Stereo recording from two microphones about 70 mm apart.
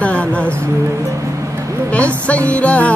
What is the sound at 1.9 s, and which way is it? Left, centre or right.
Music, centre.